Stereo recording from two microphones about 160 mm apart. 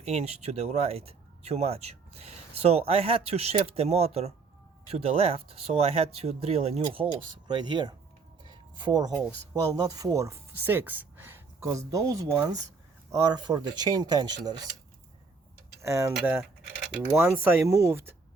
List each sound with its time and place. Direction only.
0.0 s speech: 40° right (ahead or behind)
8.4 s a sound: 30° right (ahead or behind)
9.5 s speech: 20° right (ahead or behind)
15.8 s speech: 15° right (ahead or behind)